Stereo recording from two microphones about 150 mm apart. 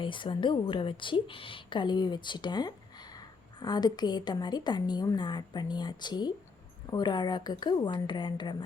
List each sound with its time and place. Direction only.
0.0 s a woman's voice: 35° left (ahead or behind)